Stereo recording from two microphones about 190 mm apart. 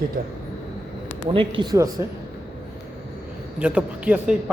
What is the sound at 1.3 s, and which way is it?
Speech, 25° right (ahead or behind).